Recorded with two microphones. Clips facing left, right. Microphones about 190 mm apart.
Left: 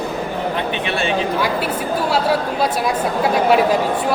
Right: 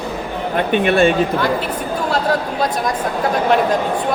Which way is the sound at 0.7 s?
50° right (ahead or behind).